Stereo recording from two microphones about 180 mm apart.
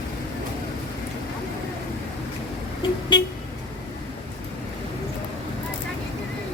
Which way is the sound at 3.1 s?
25° left (ahead or behind).